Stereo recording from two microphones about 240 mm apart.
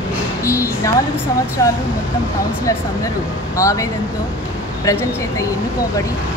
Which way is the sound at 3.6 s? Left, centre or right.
Centre.